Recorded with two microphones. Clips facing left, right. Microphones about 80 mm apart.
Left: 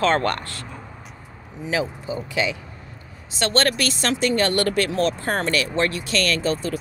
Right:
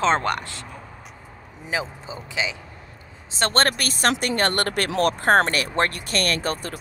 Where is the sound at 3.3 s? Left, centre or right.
Right.